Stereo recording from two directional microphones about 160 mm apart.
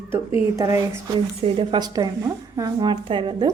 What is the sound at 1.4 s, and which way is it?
A woman's voice, 30° right (ahead or behind).